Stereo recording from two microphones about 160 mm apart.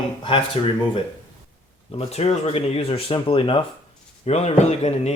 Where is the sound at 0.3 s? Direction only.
35° left (ahead or behind).